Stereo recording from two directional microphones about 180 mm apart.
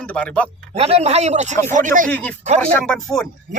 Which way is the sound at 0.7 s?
35° right (ahead or behind).